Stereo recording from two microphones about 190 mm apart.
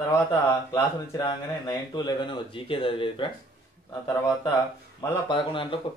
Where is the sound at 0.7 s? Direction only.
20° left (ahead or behind).